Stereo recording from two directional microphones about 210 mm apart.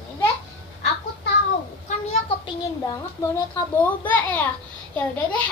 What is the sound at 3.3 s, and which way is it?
A child's voice, 10° left (ahead or behind).